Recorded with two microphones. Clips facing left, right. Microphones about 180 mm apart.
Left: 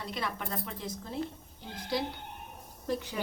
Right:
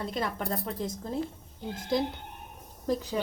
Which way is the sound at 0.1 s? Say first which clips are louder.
Right 4 dB; 40° right (ahead or behind).